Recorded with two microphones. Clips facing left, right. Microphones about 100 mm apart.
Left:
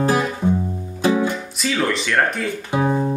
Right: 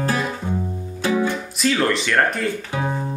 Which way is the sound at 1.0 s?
20° left (ahead or behind).